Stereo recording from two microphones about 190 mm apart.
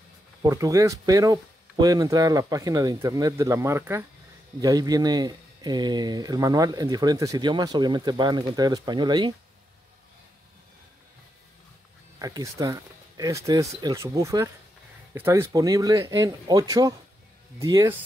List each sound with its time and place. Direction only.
0.4 s speech: 20° right (ahead or behind)
12.2 s speech: 20° right (ahead or behind)